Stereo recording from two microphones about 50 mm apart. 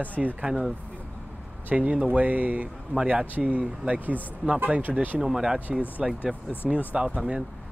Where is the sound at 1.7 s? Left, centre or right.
Right.